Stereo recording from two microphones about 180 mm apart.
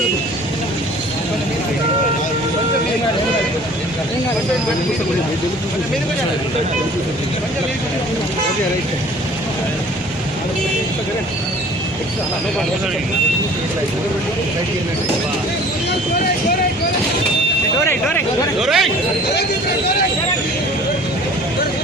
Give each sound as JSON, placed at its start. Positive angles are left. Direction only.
{"t": 18.6, "sound": "speech", "side_deg": 0}